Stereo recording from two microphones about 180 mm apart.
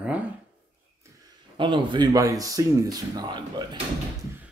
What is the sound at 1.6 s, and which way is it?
A man's voice, 25° right (ahead or behind).